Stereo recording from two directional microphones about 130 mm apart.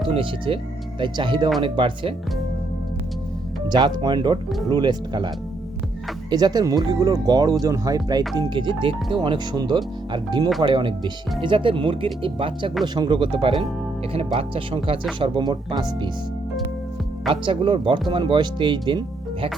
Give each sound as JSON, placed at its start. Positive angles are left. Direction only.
{"t": 0.1, "sound": "speech", "side_deg": -40}
{"t": 3.7, "sound": "speech", "side_deg": -35}
{"t": 6.3, "sound": "speech", "side_deg": -30}
{"t": 17.4, "sound": "speech", "side_deg": -40}